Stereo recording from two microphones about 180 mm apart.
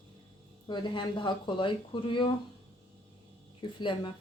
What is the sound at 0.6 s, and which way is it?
Speech, 25° left (ahead or behind).